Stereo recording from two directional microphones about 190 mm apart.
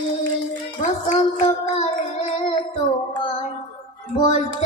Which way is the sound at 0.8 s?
35° left (ahead or behind).